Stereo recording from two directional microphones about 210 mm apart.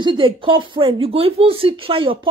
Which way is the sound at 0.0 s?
25° right (ahead or behind).